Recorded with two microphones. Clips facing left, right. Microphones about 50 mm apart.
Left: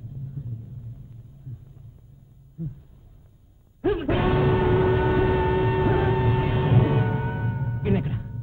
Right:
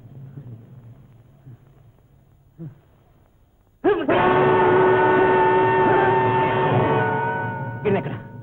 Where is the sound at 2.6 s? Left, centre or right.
Right.